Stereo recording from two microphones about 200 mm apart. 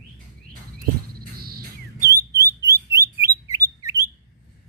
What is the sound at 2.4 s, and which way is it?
Bird, 15° right (ahead or behind).